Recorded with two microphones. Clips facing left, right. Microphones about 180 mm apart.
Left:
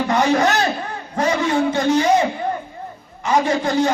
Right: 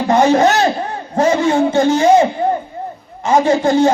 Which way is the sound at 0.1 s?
25° right (ahead or behind).